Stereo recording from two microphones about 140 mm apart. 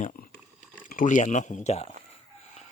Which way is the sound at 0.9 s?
70° left (ahead or behind).